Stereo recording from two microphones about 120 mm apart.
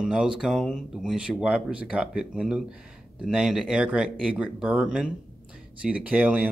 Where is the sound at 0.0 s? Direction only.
5° right (ahead or behind).